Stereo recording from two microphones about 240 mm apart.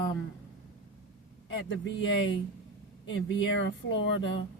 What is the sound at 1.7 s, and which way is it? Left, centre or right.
Speech, left.